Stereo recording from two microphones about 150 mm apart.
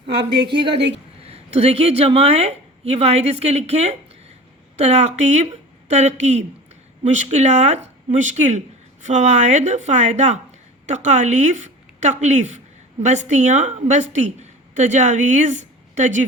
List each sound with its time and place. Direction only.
0.1 s a woman's voice: 35° right (ahead or behind); by 16.2 s 55° right (ahead or behind)